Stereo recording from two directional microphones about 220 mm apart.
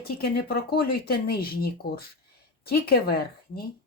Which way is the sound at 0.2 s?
45° left (ahead or behind).